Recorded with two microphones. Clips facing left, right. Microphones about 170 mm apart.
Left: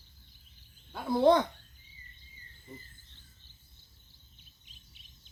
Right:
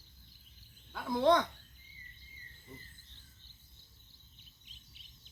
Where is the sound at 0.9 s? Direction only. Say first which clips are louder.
Left 4 dB; 30° left (ahead or behind).